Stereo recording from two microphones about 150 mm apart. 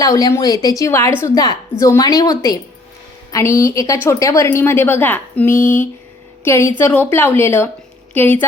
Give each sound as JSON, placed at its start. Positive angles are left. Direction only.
{"t": 0.0, "sound": "a woman's voice", "side_deg": 25}